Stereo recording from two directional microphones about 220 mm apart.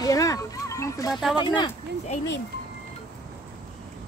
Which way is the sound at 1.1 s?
Centre (ahead or behind).